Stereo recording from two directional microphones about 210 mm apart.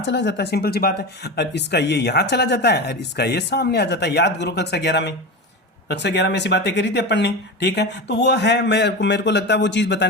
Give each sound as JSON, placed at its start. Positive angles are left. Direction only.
{"t": 0.0, "sound": "speech", "side_deg": 55}